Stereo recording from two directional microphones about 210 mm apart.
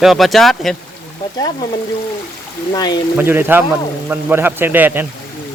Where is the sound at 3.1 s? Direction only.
10° right (ahead or behind).